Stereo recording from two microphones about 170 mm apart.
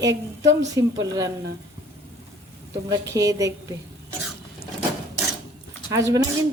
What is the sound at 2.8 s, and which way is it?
Speech, 20° right (ahead or behind).